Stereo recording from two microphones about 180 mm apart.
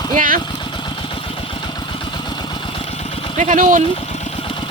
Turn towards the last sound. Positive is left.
turn(degrees=-45)  # may be behind; listen again after turning